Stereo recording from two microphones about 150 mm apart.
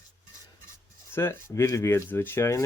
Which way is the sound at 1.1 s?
15° left (ahead or behind).